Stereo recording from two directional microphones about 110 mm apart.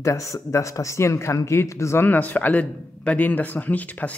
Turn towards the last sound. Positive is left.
turn(degrees=15)  # may be behind; listen again after turning